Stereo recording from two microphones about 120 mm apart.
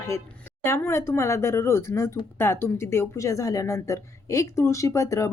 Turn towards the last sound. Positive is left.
turn(degrees=25)  # may be behind; listen again after turning